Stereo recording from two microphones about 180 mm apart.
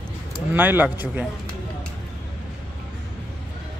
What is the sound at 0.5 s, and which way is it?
Speech, 10° right (ahead or behind).